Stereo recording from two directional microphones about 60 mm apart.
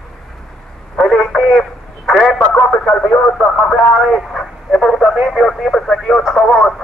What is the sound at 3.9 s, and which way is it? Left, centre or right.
Radio, centre.